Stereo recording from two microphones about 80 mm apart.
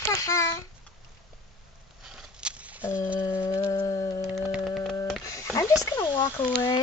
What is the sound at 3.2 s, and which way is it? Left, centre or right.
Child singing, left.